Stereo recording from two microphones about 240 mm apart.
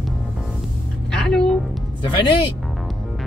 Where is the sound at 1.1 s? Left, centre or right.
Centre.